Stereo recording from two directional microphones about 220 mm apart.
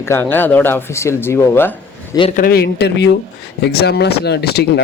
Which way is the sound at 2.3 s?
45° left (ahead or behind).